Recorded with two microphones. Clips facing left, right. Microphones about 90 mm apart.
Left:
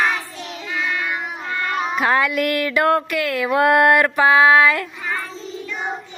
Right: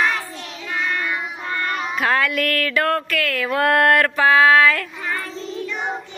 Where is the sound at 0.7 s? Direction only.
Centre (ahead or behind).